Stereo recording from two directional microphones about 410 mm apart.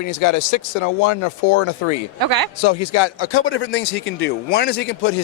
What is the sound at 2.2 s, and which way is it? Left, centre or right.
Speech, right.